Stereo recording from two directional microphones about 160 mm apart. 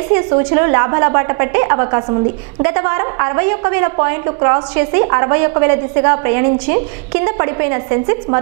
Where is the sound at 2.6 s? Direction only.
15° right (ahead or behind).